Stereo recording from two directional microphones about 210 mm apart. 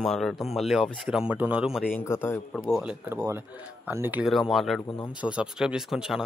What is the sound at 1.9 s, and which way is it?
Speech, 10° left (ahead or behind).